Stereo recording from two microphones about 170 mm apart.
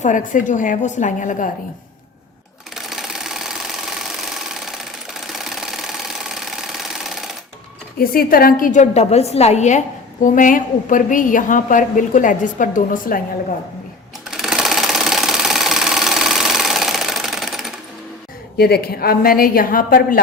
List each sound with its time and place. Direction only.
0.0 s a woman's voice: 50° left (ahead or behind)
2.7 s sewing machine: centre (ahead or behind)
5.4 s sewing machine: centre (ahead or behind)
7.9 s a woman's voice: 60° left (ahead or behind)
14.3 s sewing machine: centre (ahead or behind)
18.5 s a woman's voice: 70° left (ahead or behind)